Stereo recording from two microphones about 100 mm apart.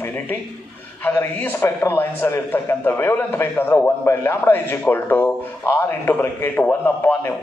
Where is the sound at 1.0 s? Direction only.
20° left (ahead or behind).